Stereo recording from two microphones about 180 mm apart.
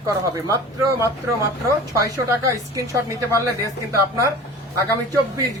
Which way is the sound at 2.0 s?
15° right (ahead or behind).